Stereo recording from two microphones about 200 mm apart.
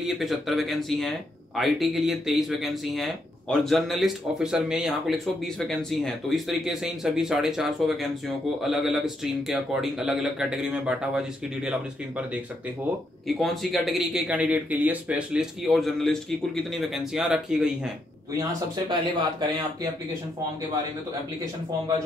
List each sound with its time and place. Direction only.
0.0 s speech: centre (ahead or behind)
13.3 s speech: centre (ahead or behind)
18.3 s speech: 15° right (ahead or behind)